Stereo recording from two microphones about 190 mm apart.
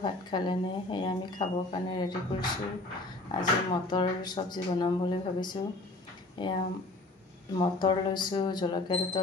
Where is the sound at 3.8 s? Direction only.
25° left (ahead or behind).